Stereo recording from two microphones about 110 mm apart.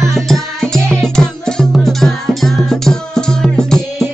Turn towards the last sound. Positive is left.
turn(degrees=5)  # may be behind; listen again after turning